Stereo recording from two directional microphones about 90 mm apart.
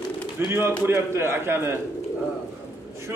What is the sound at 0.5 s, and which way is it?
A man's voice, 25° right (ahead or behind).